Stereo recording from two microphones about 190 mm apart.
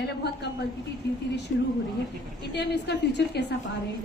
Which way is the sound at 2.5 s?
60° left (ahead or behind).